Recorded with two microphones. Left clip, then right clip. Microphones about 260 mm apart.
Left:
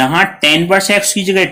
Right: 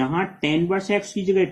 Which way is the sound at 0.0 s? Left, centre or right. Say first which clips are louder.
Left 13 dB; left.